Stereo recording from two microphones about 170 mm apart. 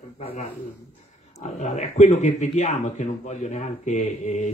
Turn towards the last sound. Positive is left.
turn(degrees=45)  # may be behind; listen again after turning